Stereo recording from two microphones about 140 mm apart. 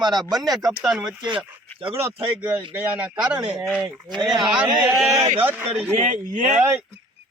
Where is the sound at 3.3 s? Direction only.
35° right (ahead or behind).